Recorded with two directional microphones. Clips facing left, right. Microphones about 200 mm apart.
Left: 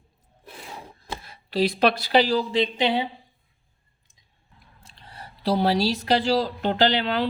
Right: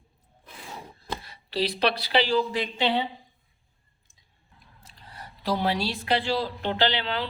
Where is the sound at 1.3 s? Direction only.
50° left (ahead or behind).